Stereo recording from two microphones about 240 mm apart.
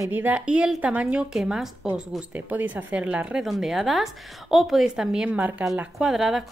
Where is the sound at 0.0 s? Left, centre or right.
Centre.